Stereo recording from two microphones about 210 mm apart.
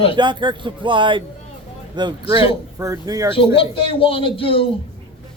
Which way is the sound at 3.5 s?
25° left (ahead or behind).